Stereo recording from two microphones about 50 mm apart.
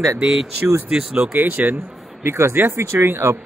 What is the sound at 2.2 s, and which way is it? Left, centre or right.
Speech, right.